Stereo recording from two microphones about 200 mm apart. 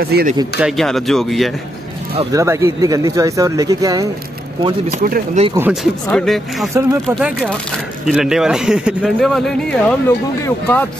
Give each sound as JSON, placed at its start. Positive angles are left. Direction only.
{"t": 0.0, "sound": "speech", "side_deg": -50}
{"t": 0.6, "sound": "speech", "side_deg": 0}
{"t": 2.3, "sound": "speech", "side_deg": -15}
{"t": 4.9, "sound": "speech", "side_deg": -40}
{"t": 6.0, "sound": "speech", "side_deg": 5}
{"t": 6.7, "sound": "speech", "side_deg": -15}